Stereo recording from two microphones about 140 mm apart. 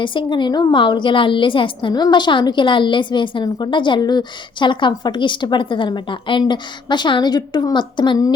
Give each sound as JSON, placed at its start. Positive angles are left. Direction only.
{"t": 0.0, "sound": "a woman's voice", "side_deg": 35}